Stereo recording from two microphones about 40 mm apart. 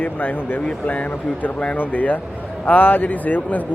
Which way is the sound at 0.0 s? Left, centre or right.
Left.